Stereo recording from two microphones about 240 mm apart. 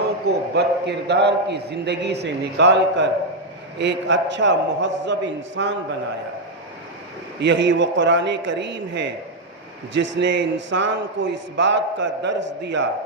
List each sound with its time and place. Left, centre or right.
0.3 s a man's voice: right
7.3 s a man's voice: right
10.2 s a man's voice: right